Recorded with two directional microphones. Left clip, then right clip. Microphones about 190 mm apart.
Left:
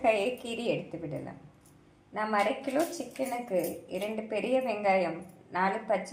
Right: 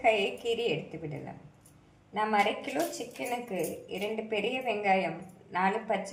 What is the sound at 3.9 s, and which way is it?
A woman's voice, 20° left (ahead or behind).